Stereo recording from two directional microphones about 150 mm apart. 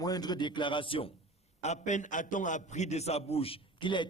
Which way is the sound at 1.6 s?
50° left (ahead or behind).